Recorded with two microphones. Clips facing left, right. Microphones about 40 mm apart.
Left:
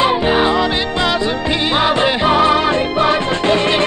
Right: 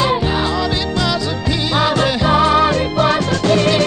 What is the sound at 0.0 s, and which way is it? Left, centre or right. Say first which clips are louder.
Music: left 3 dB; left.